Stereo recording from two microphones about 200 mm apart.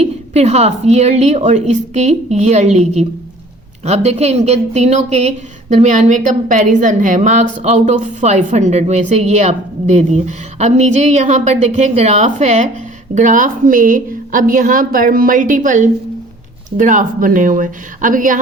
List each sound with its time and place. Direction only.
0.0 s a woman's voice: 35° right (ahead or behind)